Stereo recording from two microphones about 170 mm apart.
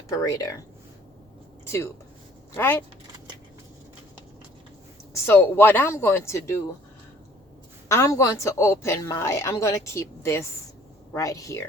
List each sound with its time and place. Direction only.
0.2 s speech: 20° left (ahead or behind)
1.6 s speech: 15° left (ahead or behind)
5.1 s a woman's voice: 15° left (ahead or behind)
7.9 s a woman's voice: 15° left (ahead or behind)